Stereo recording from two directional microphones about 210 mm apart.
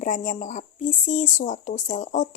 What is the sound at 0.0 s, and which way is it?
Speech, 35° left (ahead or behind).